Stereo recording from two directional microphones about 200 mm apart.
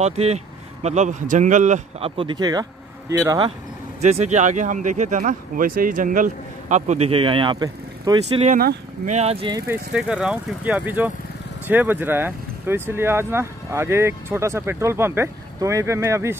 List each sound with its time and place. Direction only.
0.0 s speech: 30° right (ahead or behind)
4.0 s speech: 35° right (ahead or behind); by 8.2 s 20° right (ahead or behind)
8.4 s speech: 45° right (ahead or behind)
9.7 s speech: 5° right (ahead or behind)